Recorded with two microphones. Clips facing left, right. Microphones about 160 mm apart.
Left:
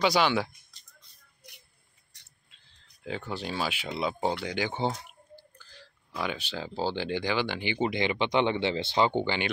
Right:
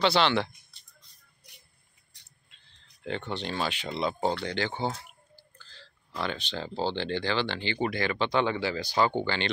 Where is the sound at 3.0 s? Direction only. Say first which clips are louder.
Right 1 dB; 5° left (ahead or behind).